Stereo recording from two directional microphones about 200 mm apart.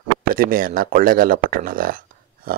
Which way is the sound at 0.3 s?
45° right (ahead or behind).